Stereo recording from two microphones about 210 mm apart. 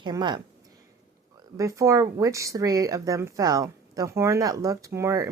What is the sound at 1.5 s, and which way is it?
Speech, 15° right (ahead or behind).